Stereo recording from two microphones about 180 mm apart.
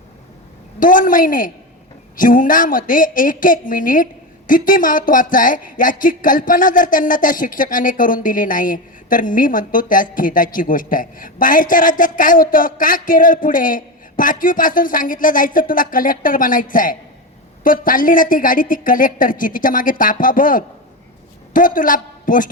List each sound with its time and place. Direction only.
0.8 s a woman's voice: 50° left (ahead or behind)